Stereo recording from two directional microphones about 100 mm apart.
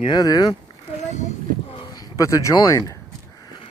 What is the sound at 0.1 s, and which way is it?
Speech, 40° left (ahead or behind).